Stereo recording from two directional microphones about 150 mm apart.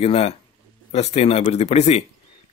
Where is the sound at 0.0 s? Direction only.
45° left (ahead or behind).